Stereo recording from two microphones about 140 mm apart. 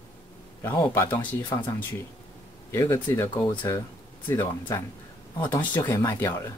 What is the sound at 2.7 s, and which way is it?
Speech, 15° left (ahead or behind).